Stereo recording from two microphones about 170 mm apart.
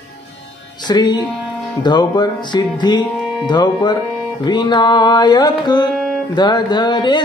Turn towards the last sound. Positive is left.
turn(degrees=25)  # may be behind; listen again after turning